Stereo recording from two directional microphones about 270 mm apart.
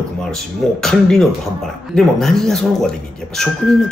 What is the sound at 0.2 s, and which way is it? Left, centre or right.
A man's voice, centre.